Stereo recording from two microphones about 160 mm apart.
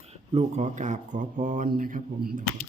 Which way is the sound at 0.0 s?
40° right (ahead or behind).